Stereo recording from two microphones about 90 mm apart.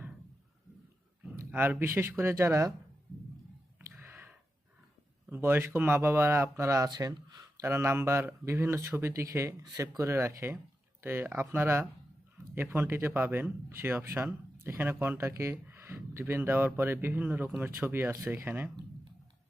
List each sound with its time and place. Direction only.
1.5 s speech: 25° right (ahead or behind)
3.8 s a sound: 25° right (ahead or behind)
5.3 s speech: 25° right (ahead or behind)